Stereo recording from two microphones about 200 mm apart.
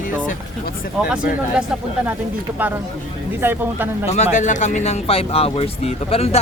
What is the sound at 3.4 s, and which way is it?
Speech, 10° right (ahead or behind).